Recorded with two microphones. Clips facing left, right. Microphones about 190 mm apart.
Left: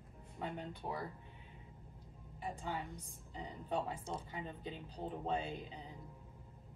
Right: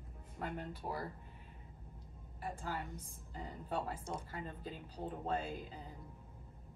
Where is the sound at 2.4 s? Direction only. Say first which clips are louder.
Even; centre (ahead or behind).